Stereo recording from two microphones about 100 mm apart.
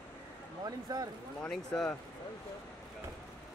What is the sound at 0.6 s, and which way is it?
Speech, 40° right (ahead or behind).